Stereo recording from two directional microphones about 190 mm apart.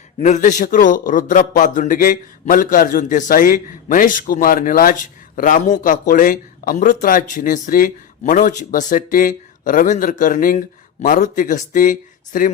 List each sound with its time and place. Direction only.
0.2 s a man's voice: 40° left (ahead or behind)